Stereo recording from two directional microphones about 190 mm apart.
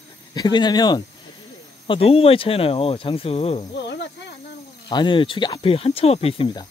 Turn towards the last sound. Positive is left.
turn(degrees=25)  # may be behind; listen again after turning